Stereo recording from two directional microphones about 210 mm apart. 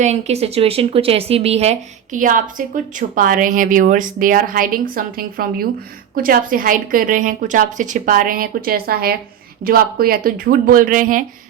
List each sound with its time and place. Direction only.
0.0 s speech: 30° right (ahead or behind)